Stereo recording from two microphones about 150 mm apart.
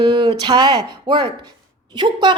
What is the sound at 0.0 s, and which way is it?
A woman's voice, 30° right (ahead or behind).